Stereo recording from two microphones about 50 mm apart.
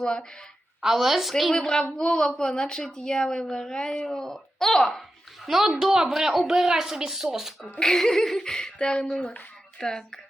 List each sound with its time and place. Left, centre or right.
0.0 s a woman's voice: centre
0.8 s a woman's voice: centre
1.5 s a woman's voice: centre
5.5 s speech: centre
7.8 s a woman's voice: centre